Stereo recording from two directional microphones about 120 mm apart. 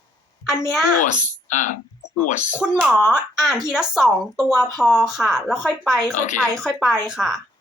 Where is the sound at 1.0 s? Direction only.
90° left.